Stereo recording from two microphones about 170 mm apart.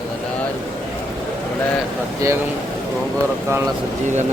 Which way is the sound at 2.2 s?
20° right (ahead or behind).